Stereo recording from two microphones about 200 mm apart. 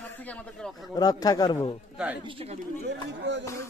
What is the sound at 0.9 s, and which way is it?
Speech, 20° left (ahead or behind).